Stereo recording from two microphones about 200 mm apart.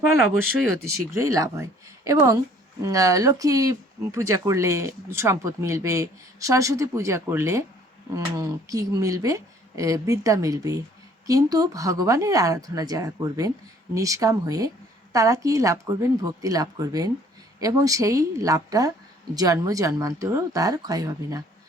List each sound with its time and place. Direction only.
1.1 s speech: 15° right (ahead or behind)